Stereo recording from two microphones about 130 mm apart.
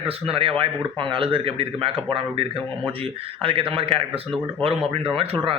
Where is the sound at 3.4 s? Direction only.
45° right (ahead or behind).